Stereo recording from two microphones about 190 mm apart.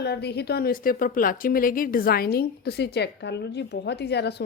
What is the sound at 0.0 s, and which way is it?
A woman's voice, 60° left (ahead or behind).